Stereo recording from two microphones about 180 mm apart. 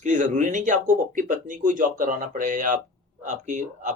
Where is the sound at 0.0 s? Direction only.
45° right (ahead or behind).